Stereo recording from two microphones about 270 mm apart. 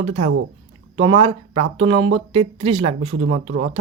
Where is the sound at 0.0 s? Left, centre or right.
Centre.